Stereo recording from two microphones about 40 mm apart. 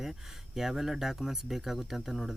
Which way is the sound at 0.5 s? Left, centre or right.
Centre.